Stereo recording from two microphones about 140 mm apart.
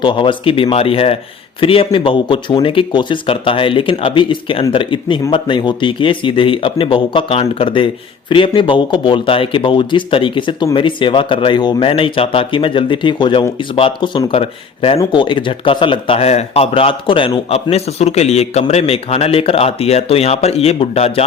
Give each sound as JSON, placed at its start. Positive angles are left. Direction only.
{"t": 0.0, "sound": "speech", "side_deg": 35}